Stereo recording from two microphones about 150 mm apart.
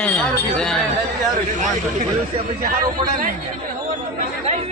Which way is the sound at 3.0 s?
35° right (ahead or behind).